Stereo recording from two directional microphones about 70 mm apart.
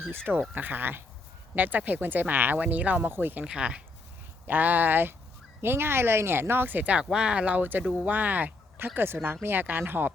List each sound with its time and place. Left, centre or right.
0.5 s speech: right
3.4 s speech: centre
7.0 s speech: centre; by 10.1 s right